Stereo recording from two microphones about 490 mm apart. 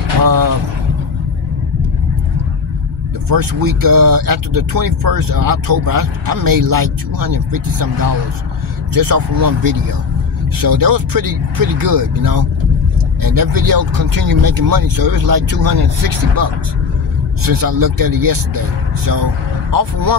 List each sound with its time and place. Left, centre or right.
0.2 s speech: right
3.3 s speech: right
19.7 s speech: right